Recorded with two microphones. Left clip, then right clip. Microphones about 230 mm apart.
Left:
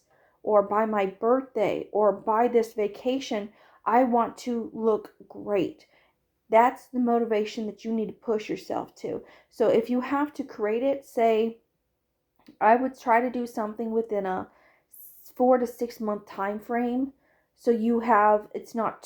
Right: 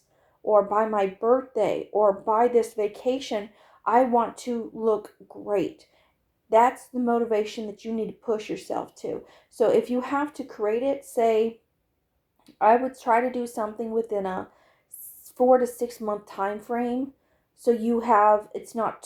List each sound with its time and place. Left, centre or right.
0.4 s speech: left
12.5 s speech: left